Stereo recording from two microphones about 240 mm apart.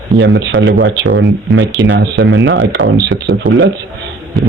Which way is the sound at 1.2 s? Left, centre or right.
Centre.